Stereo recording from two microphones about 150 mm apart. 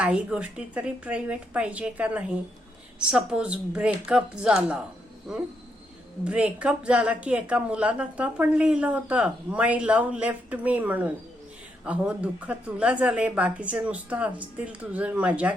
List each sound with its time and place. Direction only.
0.0 s speech: 10° right (ahead or behind)